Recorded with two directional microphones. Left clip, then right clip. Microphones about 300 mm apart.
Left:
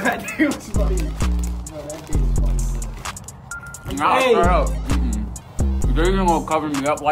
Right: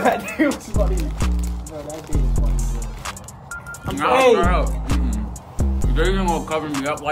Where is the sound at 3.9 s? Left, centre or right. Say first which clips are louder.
Right 1 dB; centre.